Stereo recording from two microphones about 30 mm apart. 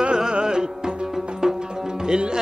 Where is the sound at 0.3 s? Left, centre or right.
Right.